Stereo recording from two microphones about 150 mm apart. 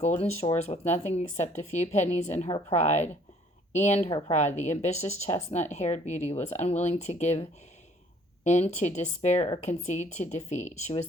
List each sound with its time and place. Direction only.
0.2 s speech: 40° left (ahead or behind)
8.4 s speech: 50° left (ahead or behind)